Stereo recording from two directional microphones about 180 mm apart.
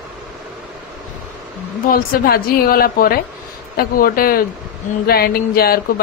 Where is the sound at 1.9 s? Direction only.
55° left (ahead or behind).